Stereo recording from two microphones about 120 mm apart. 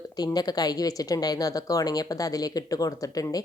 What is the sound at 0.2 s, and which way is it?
Speech, 35° left (ahead or behind).